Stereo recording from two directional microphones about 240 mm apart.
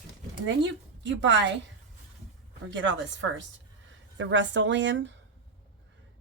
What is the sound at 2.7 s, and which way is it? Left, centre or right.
Speech, right.